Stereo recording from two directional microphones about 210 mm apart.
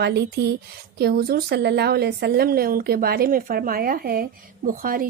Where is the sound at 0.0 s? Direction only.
50° right (ahead or behind).